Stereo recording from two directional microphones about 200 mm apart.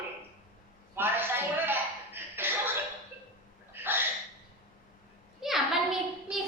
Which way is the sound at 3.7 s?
10° right (ahead or behind).